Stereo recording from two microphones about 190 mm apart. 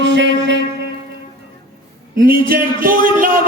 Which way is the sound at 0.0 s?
70° right (ahead or behind).